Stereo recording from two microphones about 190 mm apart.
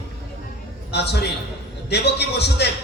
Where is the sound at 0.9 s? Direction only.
60° left (ahead or behind).